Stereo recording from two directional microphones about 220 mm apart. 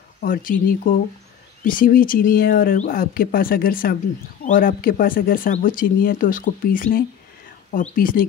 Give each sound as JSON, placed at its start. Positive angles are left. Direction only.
{"t": 0.2, "sound": "speech", "side_deg": 40}